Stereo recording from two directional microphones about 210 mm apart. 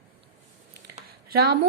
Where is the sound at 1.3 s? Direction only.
50° right (ahead or behind).